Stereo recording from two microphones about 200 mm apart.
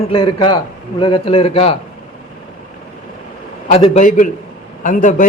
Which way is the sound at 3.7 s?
35° left (ahead or behind).